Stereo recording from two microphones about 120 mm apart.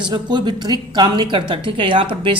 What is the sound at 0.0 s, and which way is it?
A woman's voice, 40° right (ahead or behind).